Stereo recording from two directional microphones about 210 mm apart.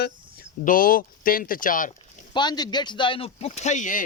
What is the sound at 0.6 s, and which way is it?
Speech, 40° left (ahead or behind).